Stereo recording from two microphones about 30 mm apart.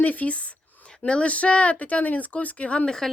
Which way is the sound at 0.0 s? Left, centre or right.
Left.